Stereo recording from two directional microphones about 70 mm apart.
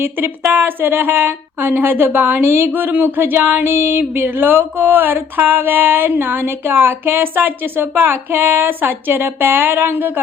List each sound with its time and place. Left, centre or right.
0.0 s a woman's voice: right